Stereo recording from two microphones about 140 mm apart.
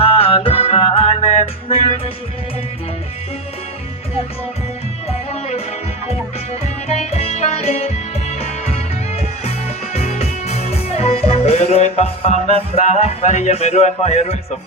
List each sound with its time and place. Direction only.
0.0 s music: 45° left (ahead or behind)
5.0 s music: 45° left (ahead or behind)